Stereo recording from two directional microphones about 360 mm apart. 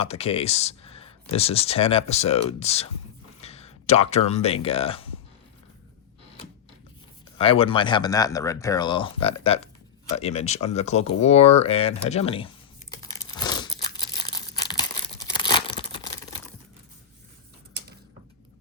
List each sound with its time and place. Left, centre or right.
0.0 s speech: centre
7.3 s speech: centre
11.2 s computer keyboard: centre
14.2 s tearing: centre
15.4 s crumpling: centre